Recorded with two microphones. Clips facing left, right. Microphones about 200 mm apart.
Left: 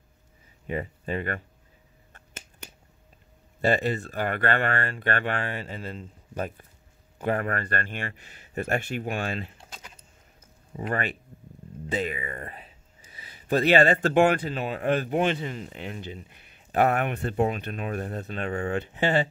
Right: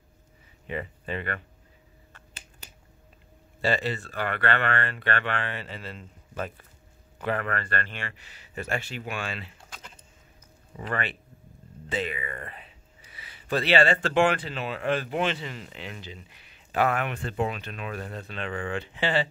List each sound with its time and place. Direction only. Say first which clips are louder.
0.7 s speech: left 3 dB; 45° left (ahead or behind)
3.6 s speech: left 3 dB; 50° left (ahead or behind)
7.2 s speech: left 2 dB; 45° left (ahead or behind)
10.8 s speech: left 3 dB; 45° left (ahead or behind)